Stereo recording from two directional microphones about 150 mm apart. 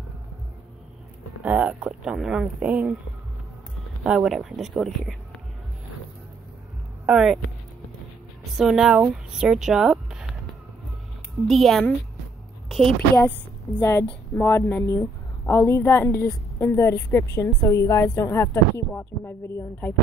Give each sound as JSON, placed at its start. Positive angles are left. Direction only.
{"t": 1.4, "sound": "speech", "side_deg": -10}
{"t": 4.0, "sound": "speech", "side_deg": -5}
{"t": 7.1, "sound": "speech", "side_deg": -5}
{"t": 8.5, "sound": "speech", "side_deg": -5}
{"t": 11.4, "sound": "a woman's voice", "side_deg": 0}
{"t": 13.7, "sound": "a woman's voice", "side_deg": 20}